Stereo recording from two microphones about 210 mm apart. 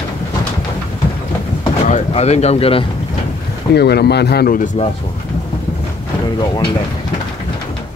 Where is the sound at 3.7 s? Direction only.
50° left (ahead or behind).